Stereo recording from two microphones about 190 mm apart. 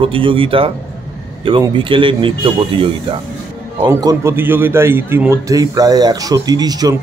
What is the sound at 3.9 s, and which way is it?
A man's voice, 15° right (ahead or behind).